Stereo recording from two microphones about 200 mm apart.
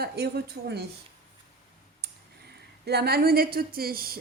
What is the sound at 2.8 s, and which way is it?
Speech, 55° right (ahead or behind).